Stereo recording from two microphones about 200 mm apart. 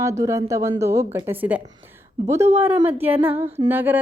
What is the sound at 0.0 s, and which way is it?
A woman's voice, 15° right (ahead or behind).